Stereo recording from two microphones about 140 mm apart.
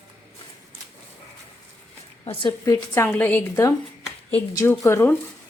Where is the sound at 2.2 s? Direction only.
40° left (ahead or behind).